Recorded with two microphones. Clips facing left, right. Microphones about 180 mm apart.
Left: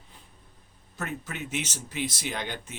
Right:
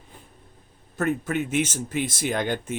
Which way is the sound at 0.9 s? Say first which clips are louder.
Right 11 dB; 50° right (ahead or behind).